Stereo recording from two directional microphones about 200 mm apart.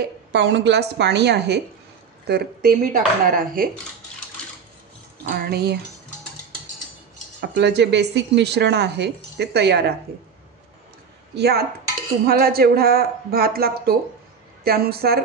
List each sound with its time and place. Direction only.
0.3 s a woman's voice: 60° right (ahead or behind)
5.2 s speech: 50° right (ahead or behind)
7.3 s a woman's voice: 55° right (ahead or behind)
11.3 s speech: 55° right (ahead or behind)